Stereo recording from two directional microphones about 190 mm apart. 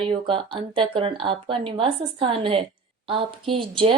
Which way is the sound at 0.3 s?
30° right (ahead or behind).